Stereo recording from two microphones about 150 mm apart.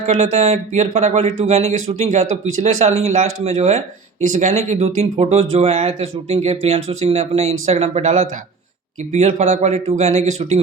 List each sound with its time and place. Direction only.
0.2 s speech: 45° right (ahead or behind)